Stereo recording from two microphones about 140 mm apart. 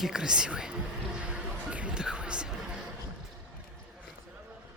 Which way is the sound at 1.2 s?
10° right (ahead or behind).